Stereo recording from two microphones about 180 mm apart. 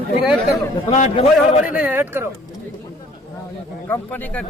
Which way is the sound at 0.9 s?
35° left (ahead or behind).